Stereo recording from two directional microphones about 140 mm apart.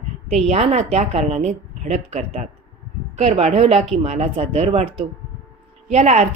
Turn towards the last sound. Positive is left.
turn(degrees=-55)  # may be behind; listen again after turning